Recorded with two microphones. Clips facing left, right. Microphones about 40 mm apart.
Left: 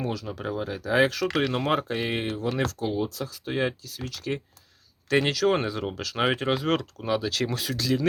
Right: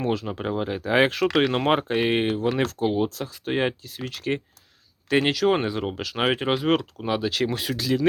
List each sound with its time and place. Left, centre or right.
0.0 s speech: right
5.0 s speech: right